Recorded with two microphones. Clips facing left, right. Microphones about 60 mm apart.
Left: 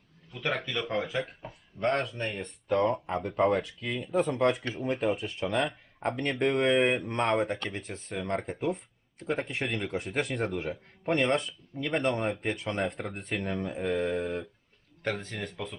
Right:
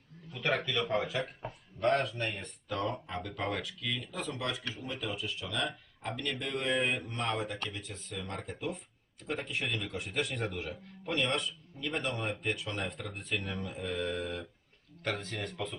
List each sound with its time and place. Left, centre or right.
0.6 s a man's voice: centre
1.0 s speech: left
15.2 s a man's voice: centre